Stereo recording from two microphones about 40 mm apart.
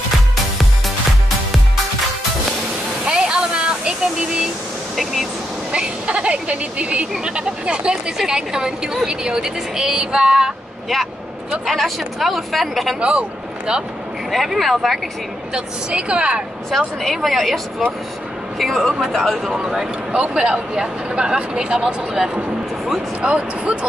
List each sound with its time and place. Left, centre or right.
3.1 s a sound: right
5.7 s a woman's voice: right
11.6 s speech: centre
13.0 s speech: right
14.3 s speech: centre
15.5 s speech: right
16.7 s speech: centre
19.6 s a woman's voice: centre
20.1 s speech: right
23.2 s speech: right